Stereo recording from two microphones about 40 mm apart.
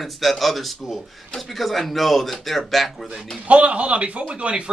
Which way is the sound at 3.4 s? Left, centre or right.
Right.